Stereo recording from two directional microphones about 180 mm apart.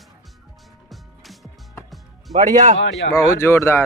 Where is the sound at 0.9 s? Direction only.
Centre (ahead or behind).